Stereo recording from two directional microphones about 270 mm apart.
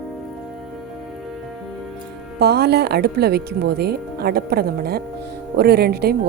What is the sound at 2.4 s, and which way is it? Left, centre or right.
Speech, right.